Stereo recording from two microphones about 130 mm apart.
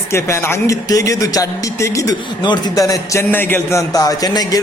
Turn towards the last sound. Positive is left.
turn(degrees=30)  # may be behind; listen again after turning